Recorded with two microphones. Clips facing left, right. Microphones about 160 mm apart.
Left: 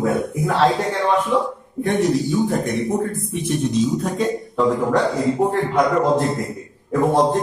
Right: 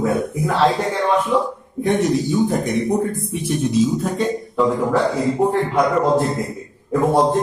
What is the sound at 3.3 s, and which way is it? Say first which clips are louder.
Speech: right 1 dB; 5° right (ahead or behind).